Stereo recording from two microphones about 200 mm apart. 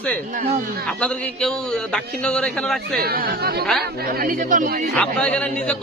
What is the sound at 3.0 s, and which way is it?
Speech, 50° right (ahead or behind).